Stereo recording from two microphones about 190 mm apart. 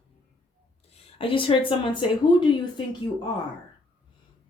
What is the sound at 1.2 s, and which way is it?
A woman's voice, 25° left (ahead or behind).